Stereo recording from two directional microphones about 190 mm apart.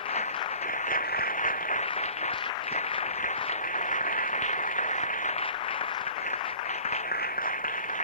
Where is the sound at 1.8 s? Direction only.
35° left (ahead or behind).